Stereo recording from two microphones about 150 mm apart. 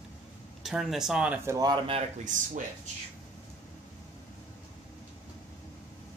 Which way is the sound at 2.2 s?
55° right (ahead or behind).